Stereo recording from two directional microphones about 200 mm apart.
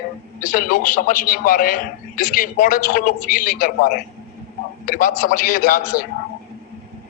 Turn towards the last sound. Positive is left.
turn(degrees=45)  # may be behind; listen again after turning